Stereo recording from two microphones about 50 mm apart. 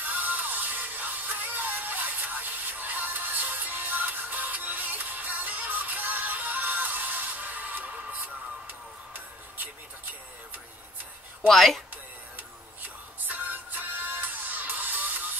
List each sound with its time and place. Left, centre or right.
0.0 s music: right
11.4 s speech: centre
12.4 s music: right